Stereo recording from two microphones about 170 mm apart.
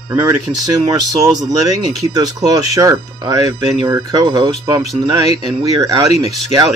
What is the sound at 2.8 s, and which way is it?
Speech, 20° right (ahead or behind).